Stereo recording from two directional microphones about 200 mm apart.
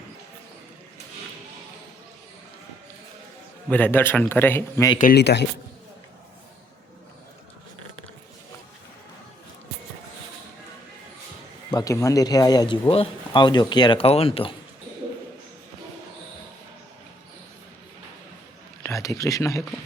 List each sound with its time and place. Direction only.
3.7 s a man's voice: 10° left (ahead or behind)
4.9 s speech: 50° left (ahead or behind)
11.7 s speech: 15° left (ahead or behind)
18.8 s speech: 15° left (ahead or behind)